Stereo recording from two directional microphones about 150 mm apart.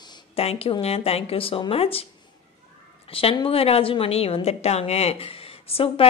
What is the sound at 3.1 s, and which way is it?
A woman's voice, 40° left (ahead or behind).